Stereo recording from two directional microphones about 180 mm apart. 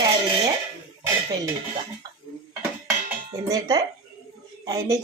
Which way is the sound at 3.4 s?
20° right (ahead or behind).